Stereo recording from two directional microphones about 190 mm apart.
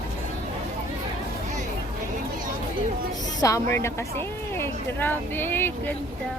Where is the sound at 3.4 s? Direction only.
15° left (ahead or behind).